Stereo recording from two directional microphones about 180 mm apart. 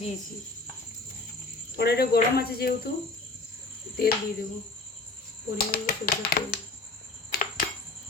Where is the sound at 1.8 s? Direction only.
60° left (ahead or behind).